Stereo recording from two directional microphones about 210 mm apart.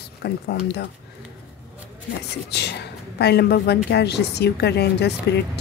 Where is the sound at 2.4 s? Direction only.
55° left (ahead or behind).